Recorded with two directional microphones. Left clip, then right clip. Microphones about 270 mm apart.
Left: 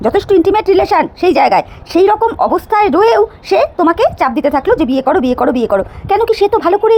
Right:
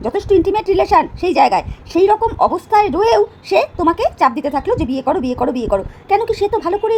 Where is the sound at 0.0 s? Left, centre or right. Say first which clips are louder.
Left 4 dB; centre.